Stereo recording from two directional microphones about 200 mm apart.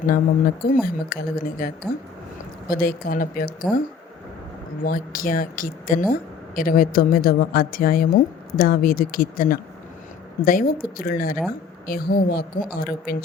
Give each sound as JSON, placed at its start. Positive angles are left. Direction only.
{"t": 0.0, "sound": "a woman's voice", "side_deg": 45}
{"t": 4.8, "sound": "a woman's voice", "side_deg": 45}